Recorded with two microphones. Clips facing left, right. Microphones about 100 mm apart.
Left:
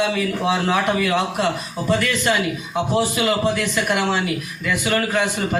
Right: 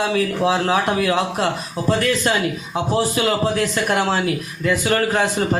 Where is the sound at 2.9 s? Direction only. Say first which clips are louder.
Right 1 dB; 40° right (ahead or behind).